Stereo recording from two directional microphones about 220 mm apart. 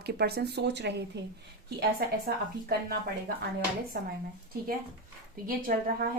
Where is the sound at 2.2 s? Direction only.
45° right (ahead or behind).